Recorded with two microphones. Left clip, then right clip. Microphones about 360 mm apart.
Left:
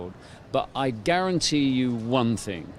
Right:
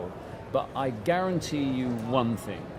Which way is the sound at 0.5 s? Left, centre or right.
Left.